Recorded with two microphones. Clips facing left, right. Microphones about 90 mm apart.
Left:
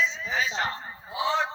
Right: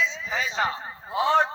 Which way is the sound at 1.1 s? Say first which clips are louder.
Right 5 dB; 50° right (ahead or behind).